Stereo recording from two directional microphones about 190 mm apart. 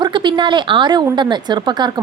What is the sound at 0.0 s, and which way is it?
A woman's voice, 25° right (ahead or behind).